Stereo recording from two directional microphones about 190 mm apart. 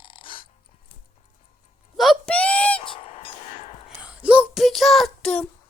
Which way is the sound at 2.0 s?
Centre (ahead or behind).